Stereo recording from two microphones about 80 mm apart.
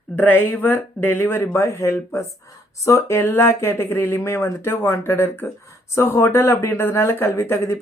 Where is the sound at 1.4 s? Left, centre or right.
Left.